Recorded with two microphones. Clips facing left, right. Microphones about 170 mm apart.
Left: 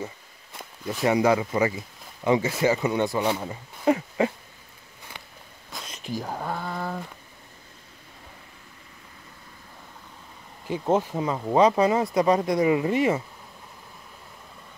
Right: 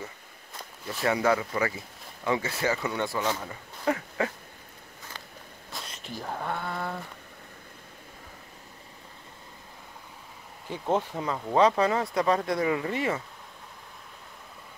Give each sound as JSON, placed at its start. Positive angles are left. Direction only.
{"t": 1.0, "sound": "speech", "side_deg": 15}
{"t": 5.7, "sound": "speech", "side_deg": 0}
{"t": 10.7, "sound": "speech", "side_deg": 10}